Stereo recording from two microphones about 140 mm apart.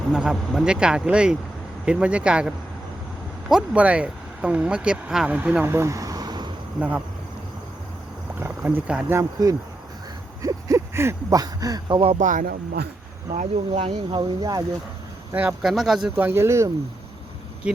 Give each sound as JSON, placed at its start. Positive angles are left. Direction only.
{"t": 0.1, "sound": "speech", "side_deg": -5}
{"t": 3.5, "sound": "speech", "side_deg": -10}
{"t": 6.7, "sound": "speech", "side_deg": -10}
{"t": 8.4, "sound": "speech", "side_deg": -15}
{"t": 9.1, "sound": "speech", "side_deg": -25}
{"t": 12.2, "sound": "speech", "side_deg": -70}
{"t": 13.7, "sound": "speech", "side_deg": -40}
{"t": 15.3, "sound": "speech", "side_deg": -10}
{"t": 15.6, "sound": "speech", "side_deg": 0}
{"t": 16.1, "sound": "speech", "side_deg": -15}